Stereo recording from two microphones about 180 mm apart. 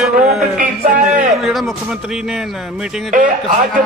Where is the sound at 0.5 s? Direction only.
50° right (ahead or behind).